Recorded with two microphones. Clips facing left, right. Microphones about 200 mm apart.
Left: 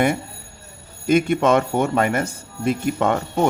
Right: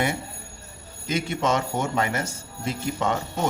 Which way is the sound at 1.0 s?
55° left (ahead or behind).